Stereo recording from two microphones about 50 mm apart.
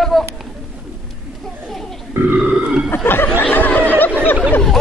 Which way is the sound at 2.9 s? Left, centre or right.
Left.